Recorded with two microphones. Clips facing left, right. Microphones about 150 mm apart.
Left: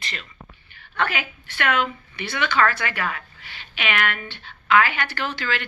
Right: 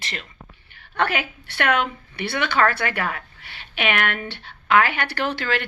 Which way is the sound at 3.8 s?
55° right (ahead or behind).